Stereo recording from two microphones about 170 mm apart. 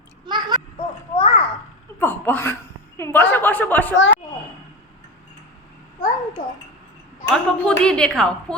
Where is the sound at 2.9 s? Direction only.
15° left (ahead or behind).